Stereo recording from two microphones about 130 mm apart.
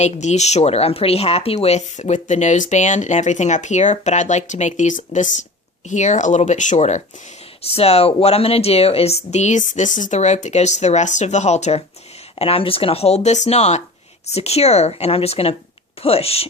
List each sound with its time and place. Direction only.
0.0 s speech: 60° left (ahead or behind)
7.6 s speech: 50° left (ahead or behind)
12.4 s speech: 45° left (ahead or behind)